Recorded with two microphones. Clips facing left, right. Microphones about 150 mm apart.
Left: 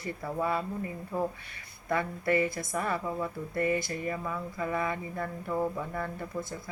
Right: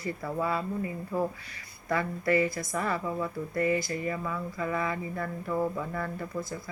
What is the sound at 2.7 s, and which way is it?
Speech, 15° left (ahead or behind).